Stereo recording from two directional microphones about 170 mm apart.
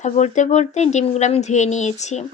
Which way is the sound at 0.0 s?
45° left (ahead or behind).